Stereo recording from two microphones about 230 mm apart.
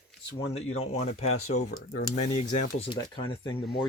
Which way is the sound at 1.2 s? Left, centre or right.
Left.